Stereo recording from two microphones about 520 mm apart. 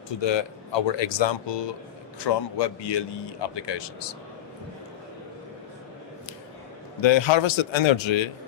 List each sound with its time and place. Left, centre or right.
0.2 s a man's voice: left
7.0 s speech: left